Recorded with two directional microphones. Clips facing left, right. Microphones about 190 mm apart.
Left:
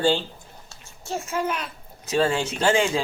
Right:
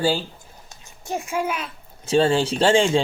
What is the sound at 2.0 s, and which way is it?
Speech, 30° right (ahead or behind).